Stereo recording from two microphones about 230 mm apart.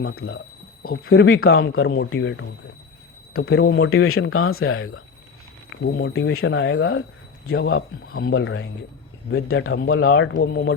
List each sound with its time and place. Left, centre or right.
0.3 s alarm clock: left
1.1 s speech: left
1.9 s speech: left
3.5 s speech: left
5.8 s speech: left